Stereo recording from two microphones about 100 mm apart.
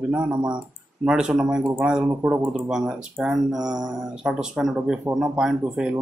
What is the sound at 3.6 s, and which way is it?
Mantra, 40° right (ahead or behind).